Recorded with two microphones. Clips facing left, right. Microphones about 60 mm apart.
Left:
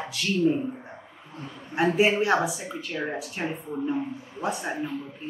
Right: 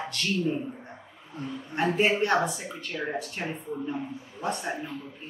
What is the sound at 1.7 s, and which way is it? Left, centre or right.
A woman's voice, centre.